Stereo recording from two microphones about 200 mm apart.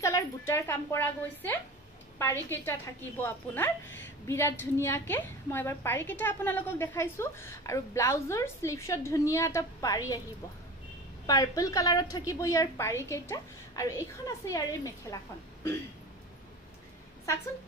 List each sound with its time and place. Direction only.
0.0 s a woman's voice: 15° left (ahead or behind)
11.2 s a woman's voice: 20° left (ahead or behind)